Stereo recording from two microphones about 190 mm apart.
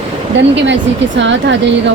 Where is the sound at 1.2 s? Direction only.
75° right (ahead or behind).